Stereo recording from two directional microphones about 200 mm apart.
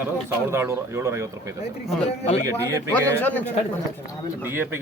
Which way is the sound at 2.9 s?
10° left (ahead or behind).